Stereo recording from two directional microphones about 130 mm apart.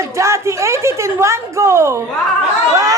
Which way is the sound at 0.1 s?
20° right (ahead or behind).